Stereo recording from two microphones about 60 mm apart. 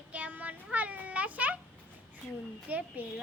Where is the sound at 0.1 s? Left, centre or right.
Right.